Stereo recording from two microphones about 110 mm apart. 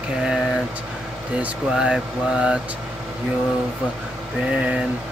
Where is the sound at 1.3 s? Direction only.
10° right (ahead or behind).